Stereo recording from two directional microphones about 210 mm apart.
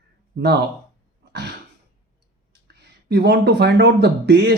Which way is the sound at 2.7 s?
50° right (ahead or behind).